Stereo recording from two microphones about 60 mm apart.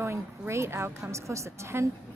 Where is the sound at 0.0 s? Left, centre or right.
Right.